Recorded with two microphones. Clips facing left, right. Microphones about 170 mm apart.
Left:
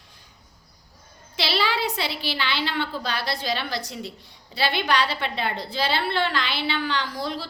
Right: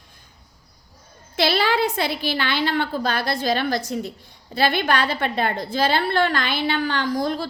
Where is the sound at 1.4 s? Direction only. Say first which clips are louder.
Right 5 dB; 50° right (ahead or behind).